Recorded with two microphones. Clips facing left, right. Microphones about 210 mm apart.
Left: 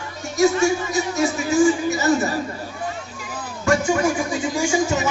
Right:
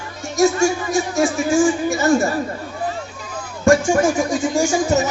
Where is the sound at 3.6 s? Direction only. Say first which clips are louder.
Right 5 dB; 45° right (ahead or behind).